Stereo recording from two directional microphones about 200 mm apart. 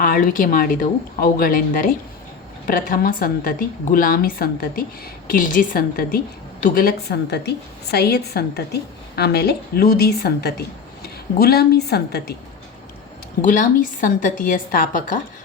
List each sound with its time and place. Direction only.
0.0 s a woman's voice: 45° left (ahead or behind)
13.4 s a woman's voice: 40° left (ahead or behind)